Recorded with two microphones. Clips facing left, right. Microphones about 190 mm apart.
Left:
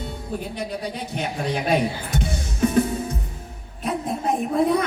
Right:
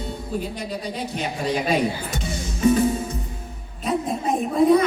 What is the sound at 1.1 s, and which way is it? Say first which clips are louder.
Music: right 1 dB; 55° left (ahead or behind).